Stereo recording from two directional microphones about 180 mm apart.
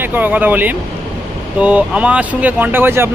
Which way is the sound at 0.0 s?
10° right (ahead or behind).